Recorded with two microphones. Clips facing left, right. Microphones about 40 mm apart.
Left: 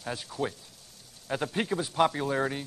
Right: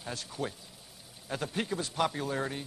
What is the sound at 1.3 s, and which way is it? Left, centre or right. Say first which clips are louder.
Speech: left 4 dB; centre.